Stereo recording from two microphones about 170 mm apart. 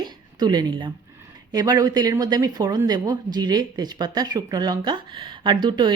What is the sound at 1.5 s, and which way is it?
Speech, 25° right (ahead or behind).